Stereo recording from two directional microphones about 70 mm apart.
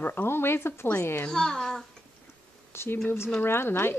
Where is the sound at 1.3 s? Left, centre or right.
Centre.